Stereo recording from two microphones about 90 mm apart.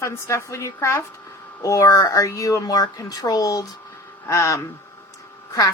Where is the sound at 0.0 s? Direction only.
30° left (ahead or behind).